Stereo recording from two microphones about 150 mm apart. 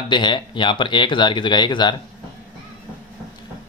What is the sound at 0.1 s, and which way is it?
Speech, 30° left (ahead or behind).